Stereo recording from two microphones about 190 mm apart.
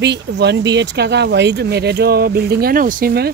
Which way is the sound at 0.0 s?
65° right (ahead or behind).